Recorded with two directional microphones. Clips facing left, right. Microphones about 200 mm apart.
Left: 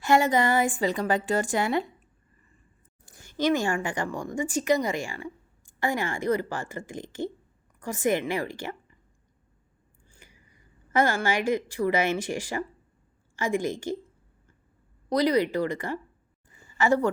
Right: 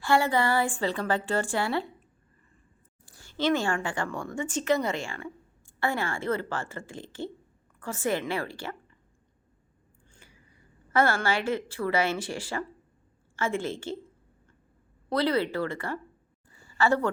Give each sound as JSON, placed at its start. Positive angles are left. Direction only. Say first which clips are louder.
{"t": 0.0, "sound": "a woman's voice", "louder": "left 2 dB", "side_deg": 20}
{"t": 3.2, "sound": "a woman's voice", "louder": "left 2 dB", "side_deg": 15}
{"t": 10.1, "sound": "scissors", "louder": "left 1 dB", "side_deg": 15}
{"t": 10.9, "sound": "a woman's voice", "louder": "left 1 dB", "side_deg": 15}
{"t": 15.1, "sound": "a woman's voice", "louder": "left 3 dB", "side_deg": 15}
{"t": 16.5, "sound": "a sound", "louder": "left 1 dB", "side_deg": 20}